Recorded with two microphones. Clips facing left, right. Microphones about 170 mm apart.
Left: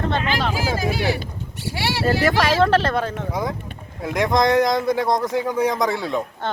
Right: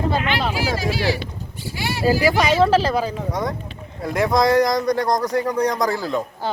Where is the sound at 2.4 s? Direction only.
Centre (ahead or behind).